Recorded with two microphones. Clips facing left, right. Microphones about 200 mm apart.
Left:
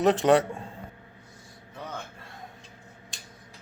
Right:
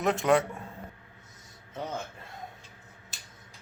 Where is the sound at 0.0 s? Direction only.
35° left (ahead or behind).